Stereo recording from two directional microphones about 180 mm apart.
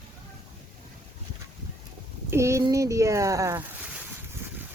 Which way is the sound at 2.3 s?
15° right (ahead or behind).